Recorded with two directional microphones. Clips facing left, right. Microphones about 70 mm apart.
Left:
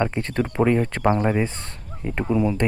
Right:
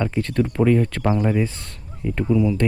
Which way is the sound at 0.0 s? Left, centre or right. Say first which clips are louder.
Right 1 dB; left.